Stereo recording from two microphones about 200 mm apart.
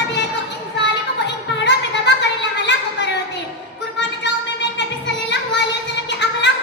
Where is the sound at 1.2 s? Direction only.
60° left (ahead or behind).